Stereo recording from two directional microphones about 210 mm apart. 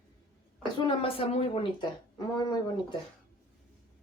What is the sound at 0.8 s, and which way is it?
Speech, 25° left (ahead or behind).